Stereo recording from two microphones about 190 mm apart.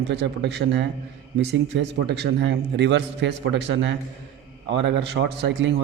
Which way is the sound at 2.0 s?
60° right (ahead or behind).